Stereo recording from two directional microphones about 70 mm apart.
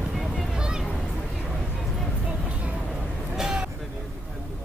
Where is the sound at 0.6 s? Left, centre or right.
Centre.